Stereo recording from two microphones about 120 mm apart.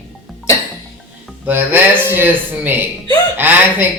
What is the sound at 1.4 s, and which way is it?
Speech, 15° right (ahead or behind).